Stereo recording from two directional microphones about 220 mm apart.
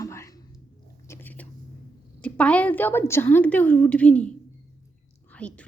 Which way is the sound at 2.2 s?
5° left (ahead or behind).